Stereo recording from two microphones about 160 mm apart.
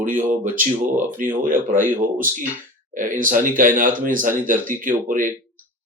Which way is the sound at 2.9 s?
55° right (ahead or behind).